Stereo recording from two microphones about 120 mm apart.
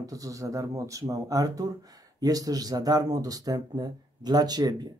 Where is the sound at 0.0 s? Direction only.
30° right (ahead or behind).